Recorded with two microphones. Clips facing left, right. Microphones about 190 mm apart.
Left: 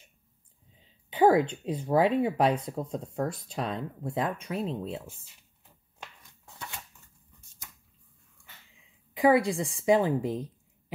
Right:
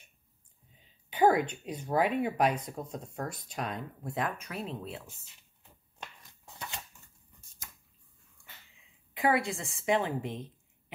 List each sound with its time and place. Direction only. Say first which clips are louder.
1.1 s a woman's voice: left 3 dB; 30° left (ahead or behind)
9.3 s speech: left 6 dB; 35° left (ahead or behind)